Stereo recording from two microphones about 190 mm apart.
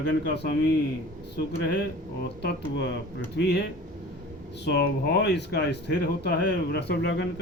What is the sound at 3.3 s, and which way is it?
Speech, 60° left (ahead or behind).